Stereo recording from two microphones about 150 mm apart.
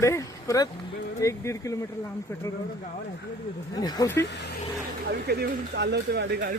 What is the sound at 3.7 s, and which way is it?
Speech, 25° left (ahead or behind).